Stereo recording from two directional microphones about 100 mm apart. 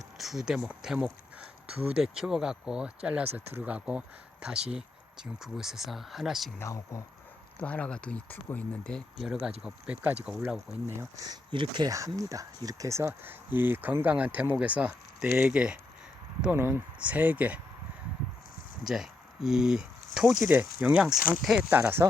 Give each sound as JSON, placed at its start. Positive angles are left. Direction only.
{"t": 0.2, "sound": "speech", "side_deg": -5}
{"t": 6.6, "sound": "speech", "side_deg": 30}
{"t": 7.6, "sound": "speech", "side_deg": 15}
{"t": 9.6, "sound": "speech", "side_deg": -10}
{"t": 11.3, "sound": "speech", "side_deg": -50}
{"t": 11.9, "sound": "speech", "side_deg": -35}
{"t": 18.8, "sound": "speech", "side_deg": -5}
{"t": 21.7, "sound": "speech", "side_deg": -20}